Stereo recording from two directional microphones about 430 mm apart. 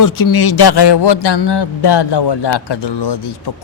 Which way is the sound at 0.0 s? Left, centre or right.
Left.